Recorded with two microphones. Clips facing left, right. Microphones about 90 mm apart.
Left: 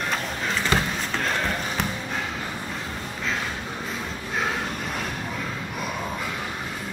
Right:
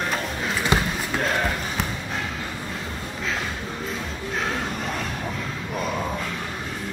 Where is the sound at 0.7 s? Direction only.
20° right (ahead or behind).